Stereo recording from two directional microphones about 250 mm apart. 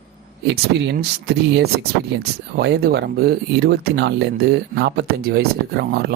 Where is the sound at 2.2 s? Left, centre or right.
Right.